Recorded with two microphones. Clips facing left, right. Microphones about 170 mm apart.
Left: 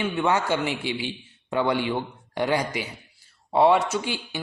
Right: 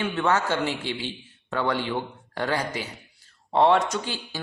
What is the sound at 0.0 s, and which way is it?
Speech, 10° left (ahead or behind).